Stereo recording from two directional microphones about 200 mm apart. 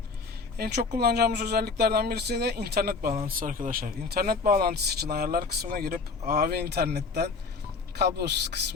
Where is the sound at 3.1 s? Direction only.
40° right (ahead or behind); by 8.3 s 55° right (ahead or behind).